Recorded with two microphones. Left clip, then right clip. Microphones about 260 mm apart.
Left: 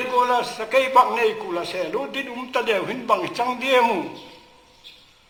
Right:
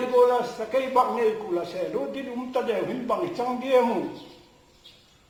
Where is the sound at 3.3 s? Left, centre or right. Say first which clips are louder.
Even; left.